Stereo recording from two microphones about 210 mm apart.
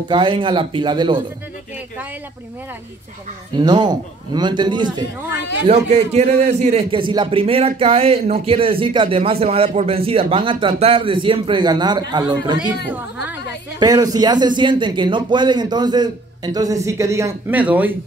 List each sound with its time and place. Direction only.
0.1 s a man's voice: 20° right (ahead or behind)
3.5 s a man's voice: 20° right (ahead or behind)